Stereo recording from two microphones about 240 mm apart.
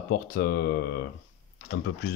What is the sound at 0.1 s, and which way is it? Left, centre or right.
Speech, left.